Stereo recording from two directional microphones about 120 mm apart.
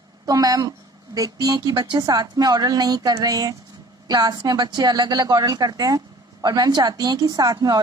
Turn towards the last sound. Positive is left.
turn(degrees=-35)  # may be behind; listen again after turning